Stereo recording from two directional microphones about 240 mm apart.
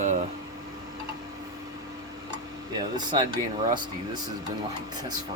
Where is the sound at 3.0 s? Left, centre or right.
Centre.